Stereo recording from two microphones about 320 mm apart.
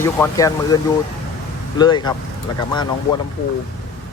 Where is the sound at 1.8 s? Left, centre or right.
Centre.